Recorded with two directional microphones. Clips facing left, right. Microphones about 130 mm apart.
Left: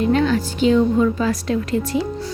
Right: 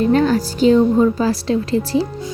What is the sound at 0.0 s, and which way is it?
A woman's voice, 40° right (ahead or behind).